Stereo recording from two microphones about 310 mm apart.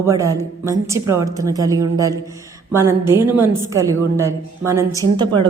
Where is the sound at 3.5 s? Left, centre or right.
Centre.